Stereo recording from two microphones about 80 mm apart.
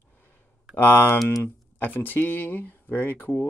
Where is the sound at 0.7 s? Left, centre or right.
Left.